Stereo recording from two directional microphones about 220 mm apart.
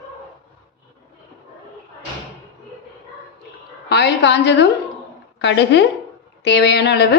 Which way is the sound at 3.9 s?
50° left (ahead or behind).